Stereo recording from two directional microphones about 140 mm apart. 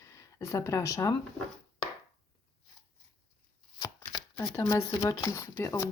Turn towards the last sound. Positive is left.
turn(degrees=20)  # may be behind; listen again after turning